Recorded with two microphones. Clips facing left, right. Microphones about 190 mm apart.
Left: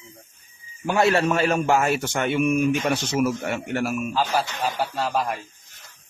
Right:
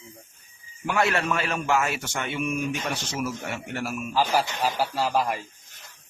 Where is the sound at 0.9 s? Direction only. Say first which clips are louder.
Left 5 dB; 30° left (ahead or behind); by 4.1 s 55° left (ahead or behind).